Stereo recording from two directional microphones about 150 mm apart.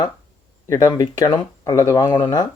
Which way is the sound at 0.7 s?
25° left (ahead or behind).